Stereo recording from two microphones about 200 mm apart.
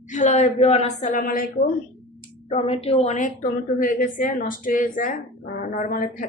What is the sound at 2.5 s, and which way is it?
A woman's voice, 30° left (ahead or behind).